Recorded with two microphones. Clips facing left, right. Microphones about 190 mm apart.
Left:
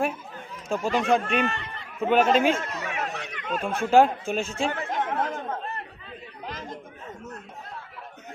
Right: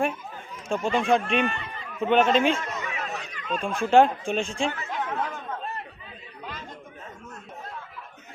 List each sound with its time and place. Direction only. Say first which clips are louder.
0.7 s speech: even; 5° left (ahead or behind)
1.5 s speech: even; 70° left (ahead or behind)
2.0 s speech: even; 5° left (ahead or behind)
2.6 s a sound: left 1 dB; 65° left (ahead or behind)
3.6 s speech: even; 5° left (ahead or behind)
4.7 s chatter: left 3 dB; 50° left (ahead or behind)